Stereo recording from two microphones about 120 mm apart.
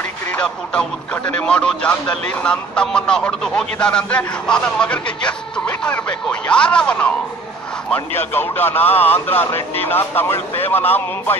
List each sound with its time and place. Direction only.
0.3 s speech: 10° left (ahead or behind)